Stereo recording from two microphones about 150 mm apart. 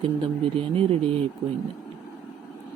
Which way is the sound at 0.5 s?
40° right (ahead or behind).